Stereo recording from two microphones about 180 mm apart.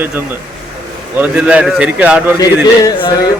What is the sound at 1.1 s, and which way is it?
A man's voice, 5° right (ahead or behind).